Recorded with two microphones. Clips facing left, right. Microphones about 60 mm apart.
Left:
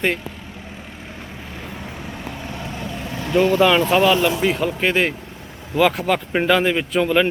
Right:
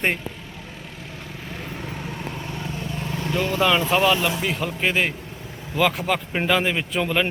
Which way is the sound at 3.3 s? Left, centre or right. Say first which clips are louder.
Left 9 dB; left.